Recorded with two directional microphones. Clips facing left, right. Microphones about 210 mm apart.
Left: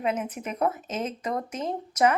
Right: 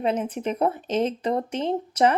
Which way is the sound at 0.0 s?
30° right (ahead or behind).